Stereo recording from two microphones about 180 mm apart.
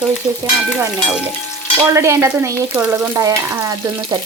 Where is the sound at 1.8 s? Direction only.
15° right (ahead or behind).